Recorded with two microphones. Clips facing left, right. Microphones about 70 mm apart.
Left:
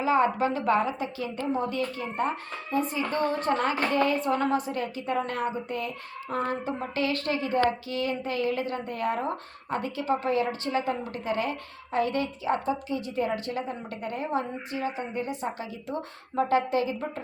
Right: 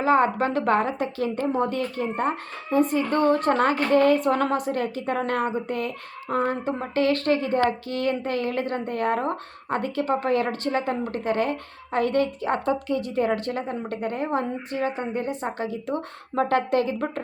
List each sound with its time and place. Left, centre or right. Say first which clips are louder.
0.0 s speech: right 3 dB; right
6.2 s speech: right 5 dB; right